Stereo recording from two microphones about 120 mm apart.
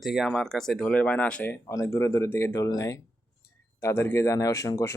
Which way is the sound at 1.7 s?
25° left (ahead or behind).